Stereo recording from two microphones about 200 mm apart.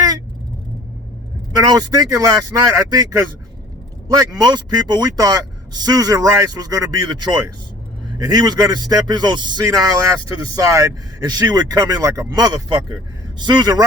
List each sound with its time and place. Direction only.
1.6 s speech: 20° right (ahead or behind)